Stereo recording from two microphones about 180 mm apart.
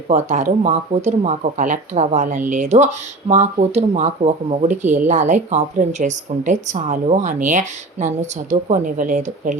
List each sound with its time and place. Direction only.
0.1 s speech: 40° right (ahead or behind)